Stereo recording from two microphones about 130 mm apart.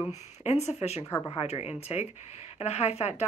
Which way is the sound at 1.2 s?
40° left (ahead or behind).